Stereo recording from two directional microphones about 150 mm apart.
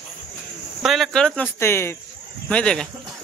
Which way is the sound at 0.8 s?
Centre (ahead or behind).